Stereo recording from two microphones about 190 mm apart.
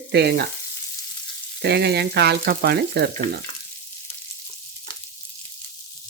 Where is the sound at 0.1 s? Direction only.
60° right (ahead or behind).